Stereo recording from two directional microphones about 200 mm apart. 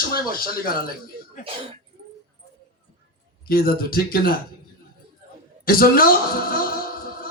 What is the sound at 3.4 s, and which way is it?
Speech, 45° left (ahead or behind).